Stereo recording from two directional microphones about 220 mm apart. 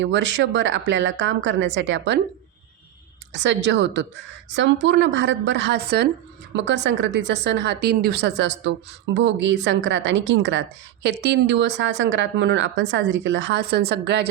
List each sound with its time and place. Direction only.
0.0 s a woman's voice: 55° right (ahead or behind)
3.3 s a woman's voice: 55° right (ahead or behind)